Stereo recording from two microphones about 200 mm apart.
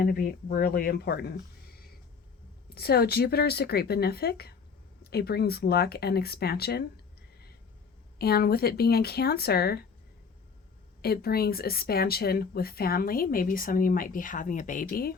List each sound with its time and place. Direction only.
0.0 s speech: 45° left (ahead or behind)
2.6 s speech: 50° left (ahead or behind)
11.0 s speech: 50° left (ahead or behind)